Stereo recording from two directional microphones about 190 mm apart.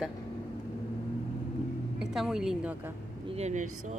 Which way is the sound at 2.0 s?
Centre (ahead or behind).